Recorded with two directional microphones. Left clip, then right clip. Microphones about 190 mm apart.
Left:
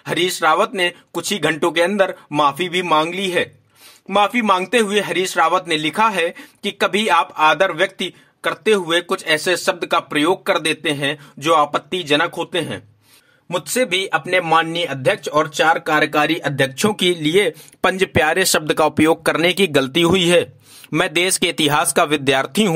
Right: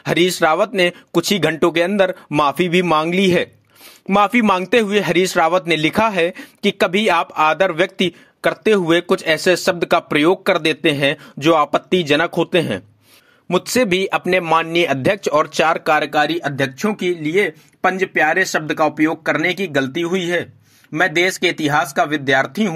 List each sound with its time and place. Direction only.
0.0 s a man's voice: 25° right (ahead or behind)
16.0 s speech: centre (ahead or behind)
16.9 s speech: 60° left (ahead or behind)
18.5 s speech: 35° left (ahead or behind)